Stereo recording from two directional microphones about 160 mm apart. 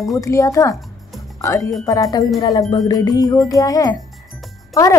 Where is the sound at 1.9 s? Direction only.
20° left (ahead or behind).